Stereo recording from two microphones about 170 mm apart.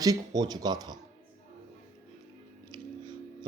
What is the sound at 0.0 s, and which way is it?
Speech, 20° right (ahead or behind).